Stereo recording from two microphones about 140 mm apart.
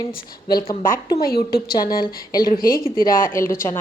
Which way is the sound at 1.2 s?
90° left.